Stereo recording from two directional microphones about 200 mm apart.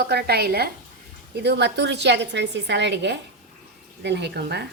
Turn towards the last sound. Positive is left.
turn(degrees=-55)  # may be behind; listen again after turning